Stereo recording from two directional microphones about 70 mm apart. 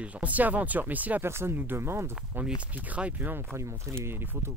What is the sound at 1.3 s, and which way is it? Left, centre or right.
Speech, right.